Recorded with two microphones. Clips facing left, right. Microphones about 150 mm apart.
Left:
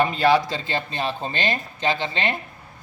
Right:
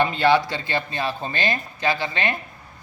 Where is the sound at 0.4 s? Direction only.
20° left (ahead or behind).